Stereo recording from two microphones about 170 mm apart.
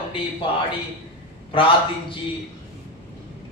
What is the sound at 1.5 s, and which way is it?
Speech, 30° left (ahead or behind).